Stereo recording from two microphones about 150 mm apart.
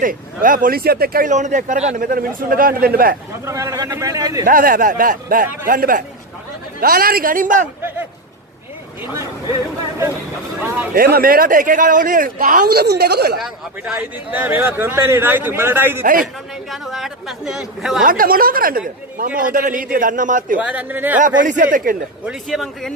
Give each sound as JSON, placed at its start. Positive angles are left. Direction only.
{"t": 0.0, "sound": "speech", "side_deg": -65}
{"t": 1.3, "sound": "speech", "side_deg": -55}
{"t": 3.4, "sound": "speech", "side_deg": -20}
{"t": 4.5, "sound": "speech", "side_deg": -70}
{"t": 6.8, "sound": "speech", "side_deg": -85}
{"t": 11.0, "sound": "speech", "side_deg": -85}
{"t": 13.4, "sound": "a man's voice", "side_deg": -5}
{"t": 16.0, "sound": "a man's voice", "side_deg": -65}
{"t": 16.7, "sound": "speech", "side_deg": 0}
{"t": 18.0, "sound": "speech", "side_deg": -70}
{"t": 20.5, "sound": "a man's voice", "side_deg": -10}
{"t": 21.4, "sound": "a man's voice", "side_deg": -60}
{"t": 22.5, "sound": "speech", "side_deg": 5}